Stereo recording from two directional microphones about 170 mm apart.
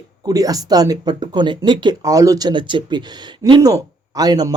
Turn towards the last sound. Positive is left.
turn(degrees=-25)  # may be behind; listen again after turning